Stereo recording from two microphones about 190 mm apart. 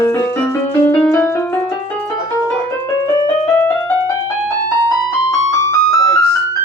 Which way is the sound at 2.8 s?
20° left (ahead or behind).